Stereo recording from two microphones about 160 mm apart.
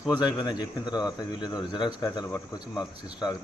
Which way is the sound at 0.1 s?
25° left (ahead or behind).